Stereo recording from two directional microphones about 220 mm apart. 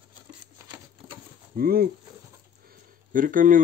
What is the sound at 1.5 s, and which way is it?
Speech, 45° right (ahead or behind).